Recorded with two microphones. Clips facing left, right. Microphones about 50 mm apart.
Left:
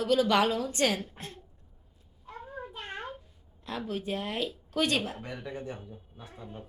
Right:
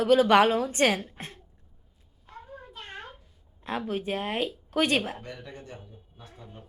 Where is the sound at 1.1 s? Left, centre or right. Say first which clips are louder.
Right 2 dB; right.